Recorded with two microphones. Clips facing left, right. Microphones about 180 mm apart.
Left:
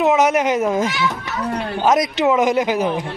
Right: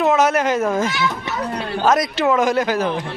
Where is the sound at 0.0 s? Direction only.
15° left (ahead or behind).